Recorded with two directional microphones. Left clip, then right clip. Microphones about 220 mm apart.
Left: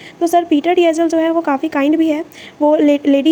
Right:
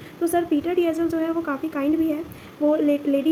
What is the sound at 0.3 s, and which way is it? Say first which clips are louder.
A woman's voice: left 9 dB; 40° left (ahead or behind).